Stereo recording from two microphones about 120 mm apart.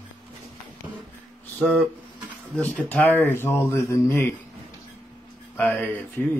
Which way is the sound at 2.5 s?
10° left (ahead or behind).